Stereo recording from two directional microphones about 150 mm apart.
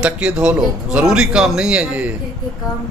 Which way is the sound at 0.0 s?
5° right (ahead or behind).